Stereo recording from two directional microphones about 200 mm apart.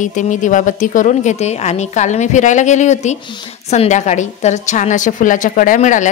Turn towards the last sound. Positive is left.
turn(degrees=40)  # may be behind; listen again after turning